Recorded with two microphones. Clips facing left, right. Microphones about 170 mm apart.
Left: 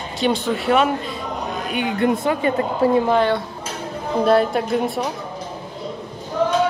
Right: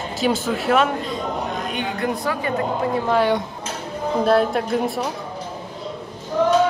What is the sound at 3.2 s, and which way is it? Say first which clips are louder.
Speech: even; 15° right (ahead or behind).